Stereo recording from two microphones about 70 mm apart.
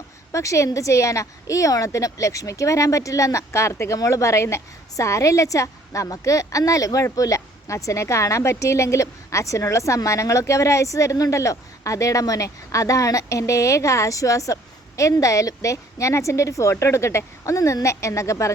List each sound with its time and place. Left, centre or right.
0.3 s a woman's voice: left